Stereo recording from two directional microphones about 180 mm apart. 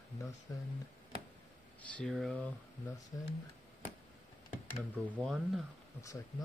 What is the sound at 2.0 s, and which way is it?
Speech, centre (ahead or behind).